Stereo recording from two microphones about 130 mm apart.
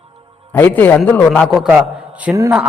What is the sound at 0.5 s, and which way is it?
Speech, 15° left (ahead or behind).